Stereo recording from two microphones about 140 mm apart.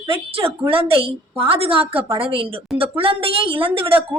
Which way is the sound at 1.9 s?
20° right (ahead or behind).